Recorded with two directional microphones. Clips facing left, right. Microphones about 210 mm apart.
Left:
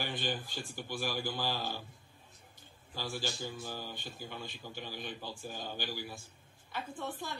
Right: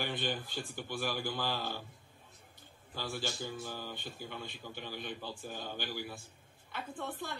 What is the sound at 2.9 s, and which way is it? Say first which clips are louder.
A man's voice: even; 55° right (ahead or behind).